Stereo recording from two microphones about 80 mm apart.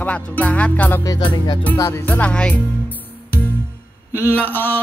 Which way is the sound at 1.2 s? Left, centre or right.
Left.